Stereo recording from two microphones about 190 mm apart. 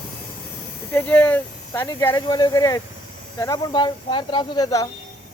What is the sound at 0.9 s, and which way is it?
Speech, 5° left (ahead or behind).